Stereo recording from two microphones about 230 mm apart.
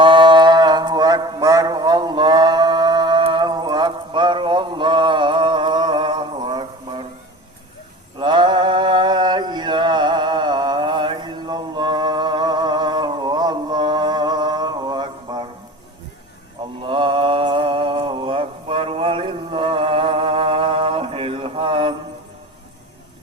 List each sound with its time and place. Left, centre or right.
0.0 s mantra: right
8.2 s a sound: centre
16.8 s mantra: right